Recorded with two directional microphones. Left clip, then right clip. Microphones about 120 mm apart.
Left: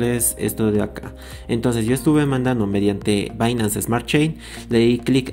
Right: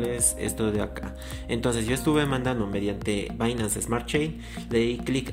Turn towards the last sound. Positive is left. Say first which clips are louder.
# left 8 dB
turn(degrees=30)  # may be behind; listen again after turning